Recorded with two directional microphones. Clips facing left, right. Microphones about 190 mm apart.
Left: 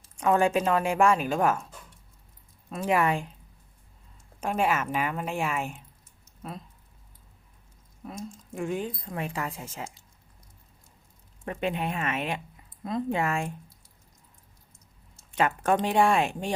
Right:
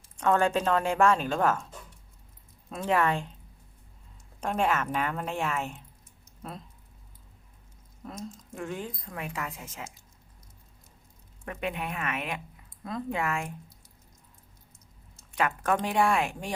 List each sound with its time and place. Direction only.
0.2 s a woman's voice: 10° left (ahead or behind)
2.6 s a woman's voice: 5° left (ahead or behind)
4.4 s a woman's voice: 10° left (ahead or behind)
8.0 s speech: 5° left (ahead or behind)
8.5 s a woman's voice: 15° left (ahead or behind)
9.1 s speech: 30° left (ahead or behind)
11.4 s a woman's voice: 30° left (ahead or behind)
15.4 s a woman's voice: 25° left (ahead or behind)